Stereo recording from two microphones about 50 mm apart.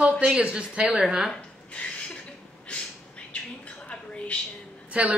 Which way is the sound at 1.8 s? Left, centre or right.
Left.